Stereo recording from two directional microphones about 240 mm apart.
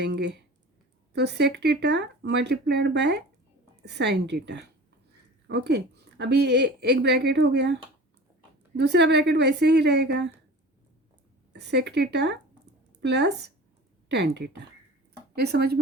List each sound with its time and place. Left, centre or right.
0.0 s a woman's voice: right
11.5 s a woman's voice: right